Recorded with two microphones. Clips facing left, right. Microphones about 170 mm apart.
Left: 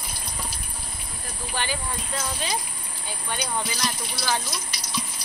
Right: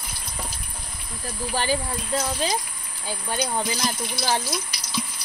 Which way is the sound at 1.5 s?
35° right (ahead or behind).